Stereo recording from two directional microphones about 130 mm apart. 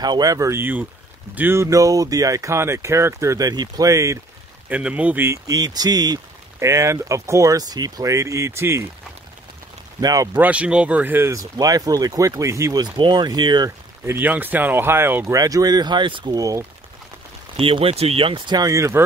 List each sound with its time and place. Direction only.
0.0 s speech: 30° right (ahead or behind)
4.6 s speech: 10° right (ahead or behind)
5.5 s speech: 30° right (ahead or behind)
9.9 s speech: 25° right (ahead or behind)
10.3 s speech: 10° right (ahead or behind); by 13.7 s 35° right (ahead or behind)
13.7 s speech: 20° right (ahead or behind)
17.6 s speech: 45° right (ahead or behind); by 19.0 s 20° right (ahead or behind)